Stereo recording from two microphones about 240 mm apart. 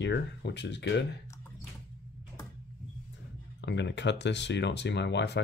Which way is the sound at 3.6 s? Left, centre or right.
Left.